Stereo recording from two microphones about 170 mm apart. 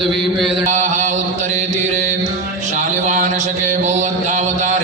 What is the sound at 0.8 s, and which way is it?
Mantra, 45° right (ahead or behind).